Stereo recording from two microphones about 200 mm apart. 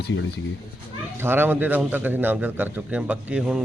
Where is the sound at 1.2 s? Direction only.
10° right (ahead or behind).